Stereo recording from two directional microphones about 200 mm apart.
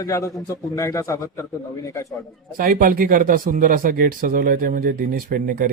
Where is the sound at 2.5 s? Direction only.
45° right (ahead or behind).